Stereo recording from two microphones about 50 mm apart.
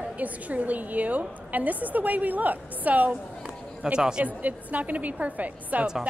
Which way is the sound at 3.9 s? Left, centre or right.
Centre.